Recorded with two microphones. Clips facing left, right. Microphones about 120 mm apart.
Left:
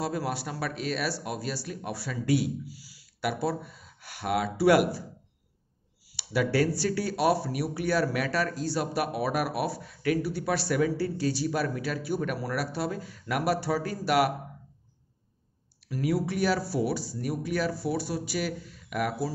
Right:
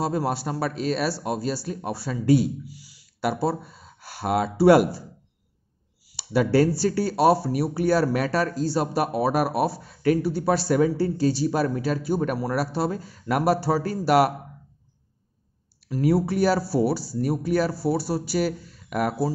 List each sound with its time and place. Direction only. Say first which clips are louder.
0.0 s speech: right 6 dB; 30° right (ahead or behind)
6.0 s a sound: right 5 dB; 30° right (ahead or behind)
6.8 s speech: right 6 dB; 30° right (ahead or behind)
15.9 s speech: right 6 dB; 35° right (ahead or behind)